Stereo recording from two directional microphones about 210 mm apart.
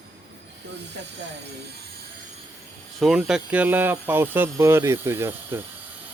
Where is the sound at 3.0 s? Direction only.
Centre (ahead or behind).